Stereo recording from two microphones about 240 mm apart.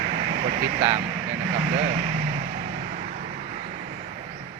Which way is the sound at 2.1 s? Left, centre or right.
Right.